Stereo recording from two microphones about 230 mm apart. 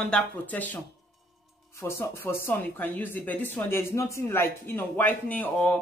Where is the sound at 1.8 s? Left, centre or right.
Centre.